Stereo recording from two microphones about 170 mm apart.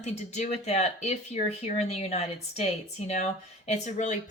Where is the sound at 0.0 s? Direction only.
40° left (ahead or behind).